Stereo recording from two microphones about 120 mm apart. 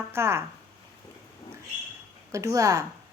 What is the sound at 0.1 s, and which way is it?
Speech, 20° right (ahead or behind).